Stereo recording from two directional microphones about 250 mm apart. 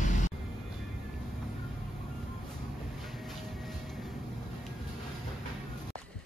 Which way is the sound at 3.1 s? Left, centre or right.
Centre.